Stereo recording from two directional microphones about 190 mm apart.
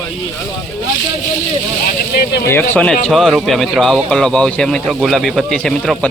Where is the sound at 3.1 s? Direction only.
Centre (ahead or behind).